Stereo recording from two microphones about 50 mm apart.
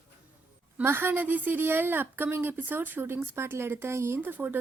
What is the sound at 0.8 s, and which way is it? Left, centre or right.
A woman's voice, right.